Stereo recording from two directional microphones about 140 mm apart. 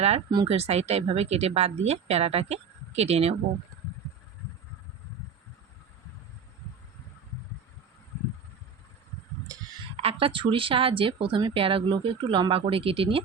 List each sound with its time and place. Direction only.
0.4 s speech: 50° right (ahead or behind)
10.0 s speech: 40° right (ahead or behind)